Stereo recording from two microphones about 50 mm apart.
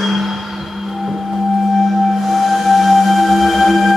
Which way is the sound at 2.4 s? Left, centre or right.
Centre.